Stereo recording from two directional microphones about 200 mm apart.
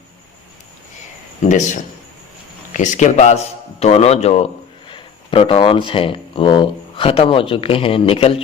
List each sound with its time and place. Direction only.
1.4 s a man's voice: 35° left (ahead or behind)